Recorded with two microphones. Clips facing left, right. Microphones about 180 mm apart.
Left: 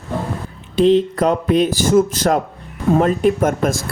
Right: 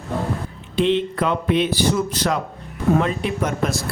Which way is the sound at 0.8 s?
40° left (ahead or behind).